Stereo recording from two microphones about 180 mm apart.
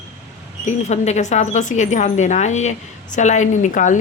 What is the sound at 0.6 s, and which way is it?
A woman's voice, 40° left (ahead or behind).